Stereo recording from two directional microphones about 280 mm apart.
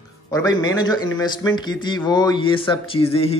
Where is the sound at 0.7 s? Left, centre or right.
Centre.